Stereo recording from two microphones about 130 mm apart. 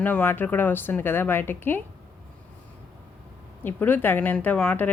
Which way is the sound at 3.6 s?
15° left (ahead or behind).